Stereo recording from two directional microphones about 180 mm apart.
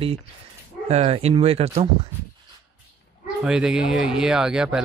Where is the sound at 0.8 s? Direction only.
35° right (ahead or behind).